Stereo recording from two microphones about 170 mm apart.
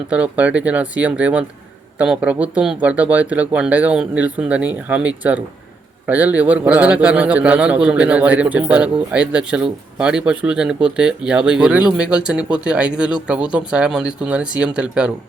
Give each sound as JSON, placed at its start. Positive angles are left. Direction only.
{"t": 0.1, "sound": "a man's voice", "side_deg": -10}